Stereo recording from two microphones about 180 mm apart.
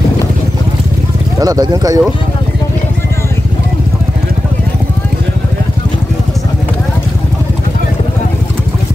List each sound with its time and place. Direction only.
1.4 s speech: 20° right (ahead or behind)